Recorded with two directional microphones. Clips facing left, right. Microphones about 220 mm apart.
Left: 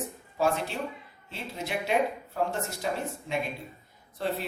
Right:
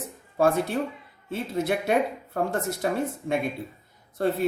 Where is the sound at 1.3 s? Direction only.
50° right (ahead or behind).